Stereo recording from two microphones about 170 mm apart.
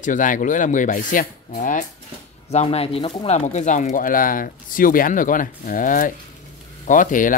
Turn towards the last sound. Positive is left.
turn(degrees=50)  # may be behind; listen again after turning